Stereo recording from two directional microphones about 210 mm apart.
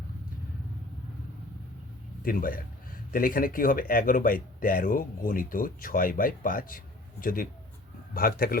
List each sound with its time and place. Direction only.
2.2 s speech: 40° left (ahead or behind)